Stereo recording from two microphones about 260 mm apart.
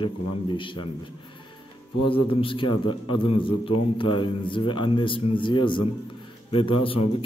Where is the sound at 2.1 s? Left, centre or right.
Centre.